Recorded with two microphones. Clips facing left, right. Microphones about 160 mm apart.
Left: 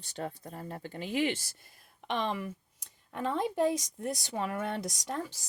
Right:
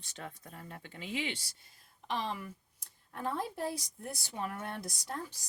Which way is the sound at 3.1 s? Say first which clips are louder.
Left 5 dB; 90° left.